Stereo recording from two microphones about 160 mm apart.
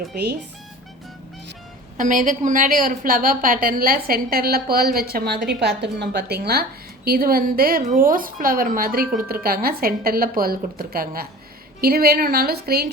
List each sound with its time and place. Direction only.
0.1 s speech: 90° right
2.0 s a woman's voice: 55° right (ahead or behind); by 12.9 s 75° right (ahead or behind)